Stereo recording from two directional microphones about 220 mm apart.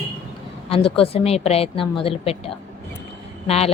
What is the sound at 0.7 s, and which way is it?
A woman's voice, 25° left (ahead or behind).